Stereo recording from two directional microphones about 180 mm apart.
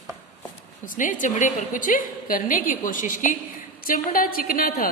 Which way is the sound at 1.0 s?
45° left (ahead or behind).